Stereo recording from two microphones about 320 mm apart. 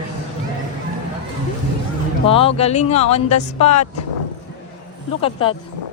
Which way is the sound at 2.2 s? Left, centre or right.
Centre.